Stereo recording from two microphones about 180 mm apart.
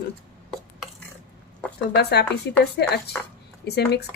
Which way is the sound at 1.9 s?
65° left (ahead or behind).